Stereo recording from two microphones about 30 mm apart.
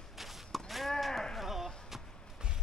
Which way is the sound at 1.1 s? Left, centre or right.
Centre.